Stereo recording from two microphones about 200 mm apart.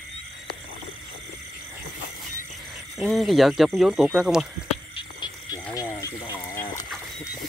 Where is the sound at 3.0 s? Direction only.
Centre (ahead or behind).